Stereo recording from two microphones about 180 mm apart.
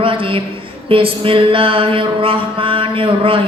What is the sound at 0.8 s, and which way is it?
Mantra, 30° right (ahead or behind).